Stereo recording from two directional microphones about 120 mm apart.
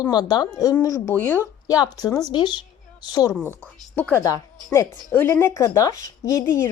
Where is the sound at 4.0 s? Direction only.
15° left (ahead or behind).